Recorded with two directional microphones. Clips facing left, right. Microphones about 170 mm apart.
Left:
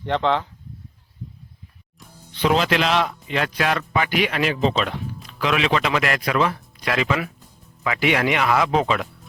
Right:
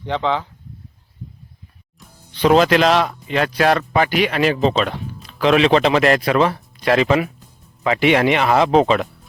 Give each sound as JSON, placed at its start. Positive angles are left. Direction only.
{"t": 0.0, "sound": "speech", "side_deg": 0}
{"t": 2.4, "sound": "speech", "side_deg": -40}